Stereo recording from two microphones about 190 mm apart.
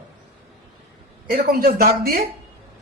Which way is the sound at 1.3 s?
50° right (ahead or behind).